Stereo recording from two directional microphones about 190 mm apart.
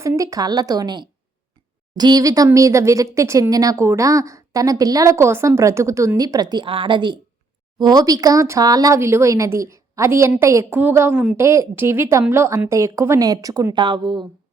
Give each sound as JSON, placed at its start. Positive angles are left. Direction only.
{"t": 0.0, "sound": "a woman's voice", "side_deg": -15}